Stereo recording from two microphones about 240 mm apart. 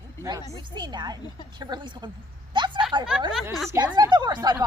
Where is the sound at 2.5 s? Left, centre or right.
Centre.